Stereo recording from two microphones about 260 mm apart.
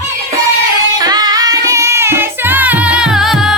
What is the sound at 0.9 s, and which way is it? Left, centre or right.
Music, centre.